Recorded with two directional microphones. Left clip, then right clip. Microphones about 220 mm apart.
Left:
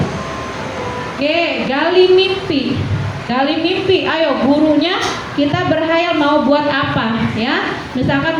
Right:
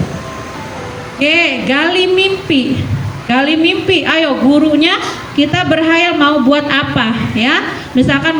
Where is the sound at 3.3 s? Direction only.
40° right (ahead or behind).